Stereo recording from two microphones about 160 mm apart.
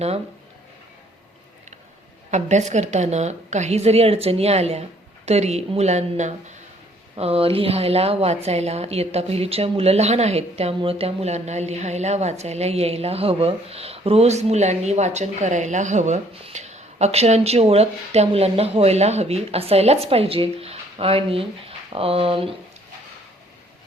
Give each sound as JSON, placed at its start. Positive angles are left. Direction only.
{"t": 2.3, "sound": "a woman's voice", "side_deg": -45}